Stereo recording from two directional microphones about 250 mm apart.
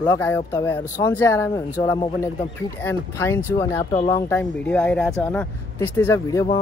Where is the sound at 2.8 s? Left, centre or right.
Centre.